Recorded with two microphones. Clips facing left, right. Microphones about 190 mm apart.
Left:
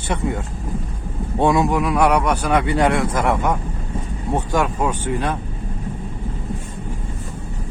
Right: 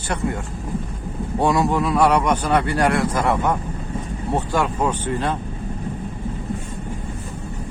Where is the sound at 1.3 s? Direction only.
20° left (ahead or behind).